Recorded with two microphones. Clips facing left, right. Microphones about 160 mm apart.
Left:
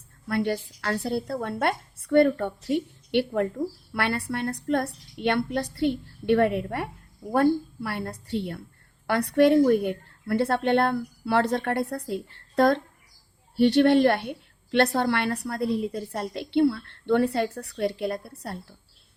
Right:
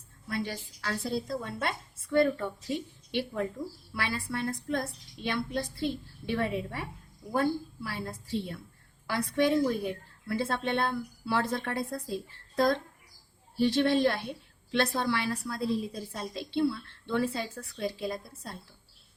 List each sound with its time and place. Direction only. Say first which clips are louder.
0.3 s a woman's voice: left 8 dB; 60° left (ahead or behind)